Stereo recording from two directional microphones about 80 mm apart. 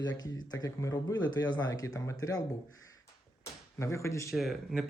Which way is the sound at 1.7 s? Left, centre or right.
Left.